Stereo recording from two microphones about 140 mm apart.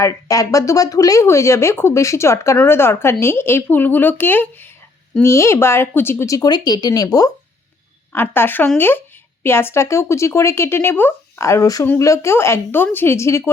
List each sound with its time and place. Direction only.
0.0 s speech: 25° left (ahead or behind)
8.1 s speech: 15° left (ahead or behind)